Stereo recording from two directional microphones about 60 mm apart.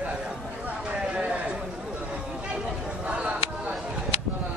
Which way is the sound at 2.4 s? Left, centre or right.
Centre.